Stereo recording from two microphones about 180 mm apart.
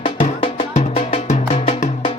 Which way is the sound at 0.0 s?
35° left (ahead or behind).